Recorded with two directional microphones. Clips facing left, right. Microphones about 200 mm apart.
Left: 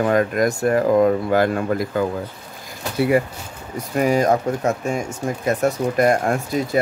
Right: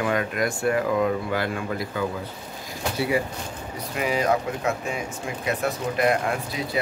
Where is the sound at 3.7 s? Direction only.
45° left (ahead or behind).